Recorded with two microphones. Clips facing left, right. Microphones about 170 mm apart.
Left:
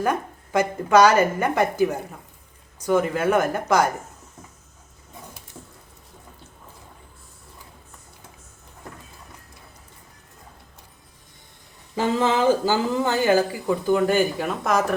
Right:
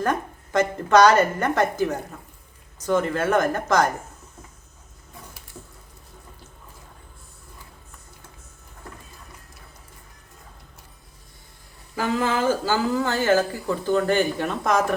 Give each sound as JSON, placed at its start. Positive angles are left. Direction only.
{"t": 0.0, "sound": "a woman's voice", "side_deg": 10}
{"t": 11.9, "sound": "a woman's voice", "side_deg": 20}